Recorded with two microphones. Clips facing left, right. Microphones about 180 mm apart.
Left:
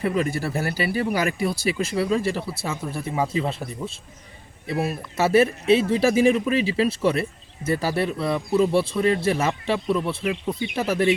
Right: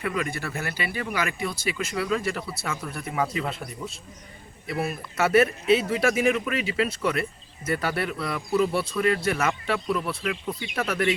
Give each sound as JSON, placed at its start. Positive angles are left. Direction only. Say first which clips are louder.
{"t": 0.0, "sound": "speech", "louder": "left 5 dB", "side_deg": 35}
{"t": 5.1, "sound": "speech", "louder": "left 2 dB", "side_deg": 25}